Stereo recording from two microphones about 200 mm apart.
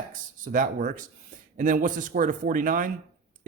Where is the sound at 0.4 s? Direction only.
40° right (ahead or behind).